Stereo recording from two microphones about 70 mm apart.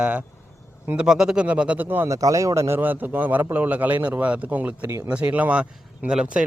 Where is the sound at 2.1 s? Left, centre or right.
Right.